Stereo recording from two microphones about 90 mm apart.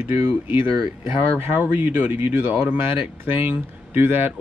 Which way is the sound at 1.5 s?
15° right (ahead or behind).